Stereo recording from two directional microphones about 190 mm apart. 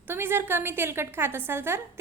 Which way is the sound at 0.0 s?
10° right (ahead or behind).